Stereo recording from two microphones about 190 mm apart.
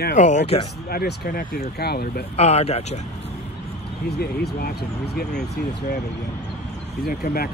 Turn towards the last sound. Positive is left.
turn(degrees=50)  # may be behind; listen again after turning